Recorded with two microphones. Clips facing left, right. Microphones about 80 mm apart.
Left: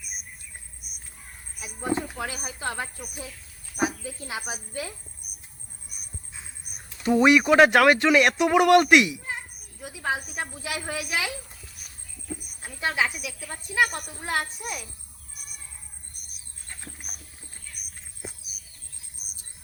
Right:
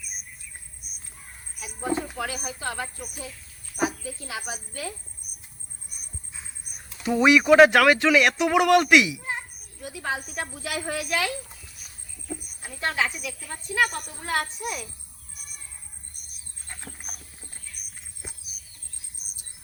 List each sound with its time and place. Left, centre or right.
1.6 s speech: left
6.7 s a woman's voice: centre
12.6 s a woman's voice: centre